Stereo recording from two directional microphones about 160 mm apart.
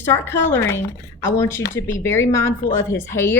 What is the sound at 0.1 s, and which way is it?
Speech, 15° left (ahead or behind).